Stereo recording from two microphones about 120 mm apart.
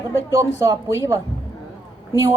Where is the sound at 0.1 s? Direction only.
25° right (ahead or behind).